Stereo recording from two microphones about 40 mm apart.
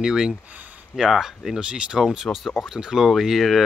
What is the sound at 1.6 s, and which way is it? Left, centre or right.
Speech, right.